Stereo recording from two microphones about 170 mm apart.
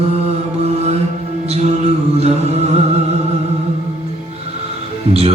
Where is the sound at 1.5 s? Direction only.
40° right (ahead or behind).